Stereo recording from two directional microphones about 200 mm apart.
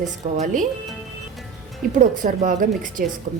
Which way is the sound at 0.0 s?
40° right (ahead or behind).